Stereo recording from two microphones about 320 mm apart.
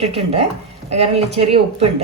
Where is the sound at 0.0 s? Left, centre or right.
Centre.